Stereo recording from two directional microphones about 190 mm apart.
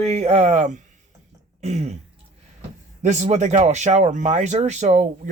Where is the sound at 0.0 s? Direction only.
35° right (ahead or behind).